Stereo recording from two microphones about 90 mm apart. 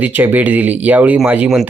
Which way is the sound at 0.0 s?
20° right (ahead or behind).